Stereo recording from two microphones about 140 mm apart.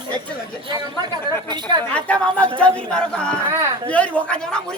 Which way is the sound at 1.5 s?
30° right (ahead or behind).